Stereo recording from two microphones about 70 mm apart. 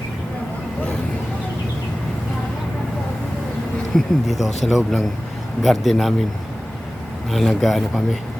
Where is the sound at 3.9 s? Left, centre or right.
Centre.